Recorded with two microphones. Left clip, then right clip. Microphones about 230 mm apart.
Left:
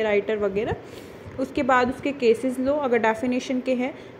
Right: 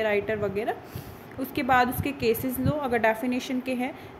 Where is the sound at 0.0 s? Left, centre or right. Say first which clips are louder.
Left 3 dB; centre.